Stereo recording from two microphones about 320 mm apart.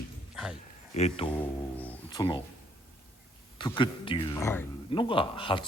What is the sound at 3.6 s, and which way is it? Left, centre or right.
A man's voice, centre.